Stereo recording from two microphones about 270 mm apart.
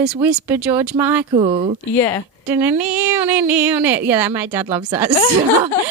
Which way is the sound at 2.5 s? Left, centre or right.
Centre.